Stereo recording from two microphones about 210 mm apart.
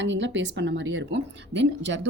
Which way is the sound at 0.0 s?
60° right (ahead or behind).